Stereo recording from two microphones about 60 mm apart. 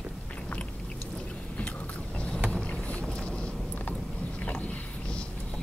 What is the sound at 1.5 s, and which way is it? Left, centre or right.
Vehicle, left.